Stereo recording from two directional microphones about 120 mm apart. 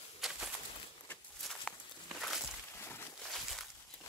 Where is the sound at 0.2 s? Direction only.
Centre (ahead or behind).